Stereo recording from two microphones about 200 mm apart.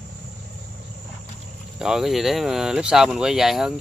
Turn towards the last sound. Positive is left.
turn(degrees=0)  # may be behind; listen again after turning